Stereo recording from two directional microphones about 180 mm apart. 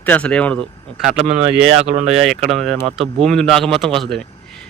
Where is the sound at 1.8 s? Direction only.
35° right (ahead or behind).